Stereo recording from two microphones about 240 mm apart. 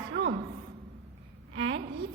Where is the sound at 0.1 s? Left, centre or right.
Right.